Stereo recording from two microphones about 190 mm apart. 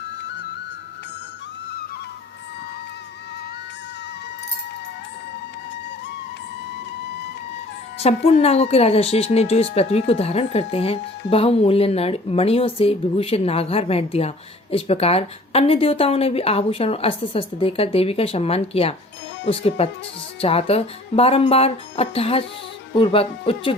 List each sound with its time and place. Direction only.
0.2 s music: 65° left (ahead or behind)
7.9 s speech: 30° left (ahead or behind)